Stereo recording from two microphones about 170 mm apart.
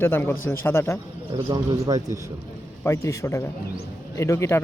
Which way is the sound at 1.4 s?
20° right (ahead or behind).